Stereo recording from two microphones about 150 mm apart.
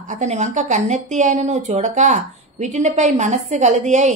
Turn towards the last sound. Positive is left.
turn(degrees=-50)  # may be behind; listen again after turning